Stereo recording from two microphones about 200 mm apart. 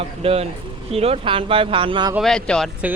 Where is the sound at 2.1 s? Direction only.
Centre (ahead or behind).